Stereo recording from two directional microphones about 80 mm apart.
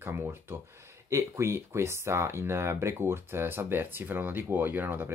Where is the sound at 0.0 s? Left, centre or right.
Right.